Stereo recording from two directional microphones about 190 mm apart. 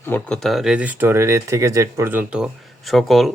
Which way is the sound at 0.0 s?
10° left (ahead or behind).